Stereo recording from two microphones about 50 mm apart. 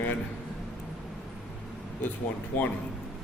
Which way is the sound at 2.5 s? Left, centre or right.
Left.